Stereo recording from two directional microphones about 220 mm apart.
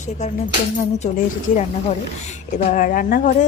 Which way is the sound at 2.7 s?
40° left (ahead or behind).